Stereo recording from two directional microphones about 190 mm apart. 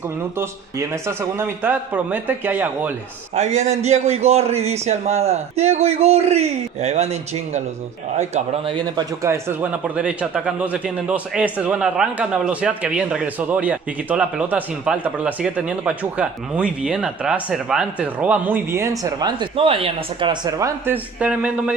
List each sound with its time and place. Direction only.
0.4 s speech: 15° right (ahead or behind)
3.3 s a man's voice: 35° right (ahead or behind)
8.7 s speech: 20° right (ahead or behind); by 21.7 s 5° right (ahead or behind)